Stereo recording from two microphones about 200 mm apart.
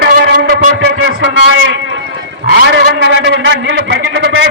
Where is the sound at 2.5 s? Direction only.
55° right (ahead or behind).